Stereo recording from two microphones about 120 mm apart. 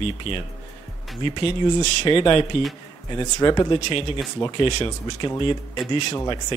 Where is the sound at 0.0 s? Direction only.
50° left (ahead or behind).